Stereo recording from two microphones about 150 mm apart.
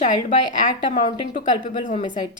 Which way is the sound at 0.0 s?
55° left (ahead or behind).